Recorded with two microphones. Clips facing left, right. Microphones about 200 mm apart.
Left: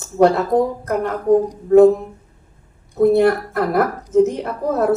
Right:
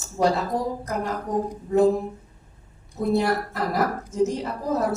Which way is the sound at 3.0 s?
60° left (ahead or behind).